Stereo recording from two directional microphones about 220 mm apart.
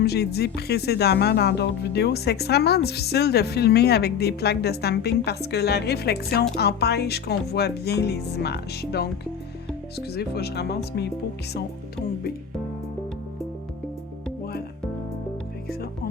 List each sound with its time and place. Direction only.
0.0 s speech: 45° left (ahead or behind)
10.1 s speech: 45° left (ahead or behind)